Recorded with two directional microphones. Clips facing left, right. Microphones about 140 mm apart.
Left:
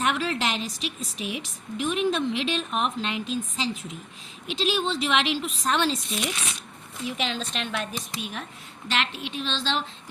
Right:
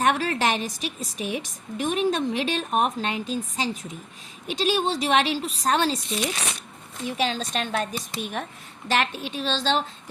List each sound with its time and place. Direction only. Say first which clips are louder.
0.0 s speech: right 3 dB; 45° right (ahead or behind)